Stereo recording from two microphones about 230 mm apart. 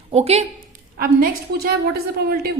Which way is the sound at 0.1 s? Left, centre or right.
Right.